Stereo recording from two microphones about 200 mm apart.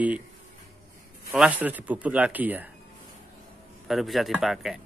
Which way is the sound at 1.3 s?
5° right (ahead or behind).